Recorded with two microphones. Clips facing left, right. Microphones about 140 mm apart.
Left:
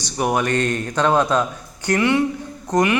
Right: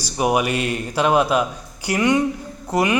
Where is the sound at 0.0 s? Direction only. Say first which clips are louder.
Right 1 dB; 15° right (ahead or behind).